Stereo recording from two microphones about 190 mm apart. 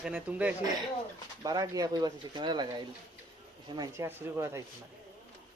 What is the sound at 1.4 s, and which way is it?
Speech, 20° right (ahead or behind).